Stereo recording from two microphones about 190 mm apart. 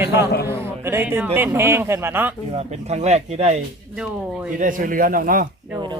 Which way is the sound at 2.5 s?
35° right (ahead or behind).